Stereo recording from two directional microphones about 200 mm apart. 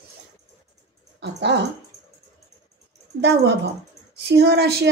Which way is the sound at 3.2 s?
55° right (ahead or behind).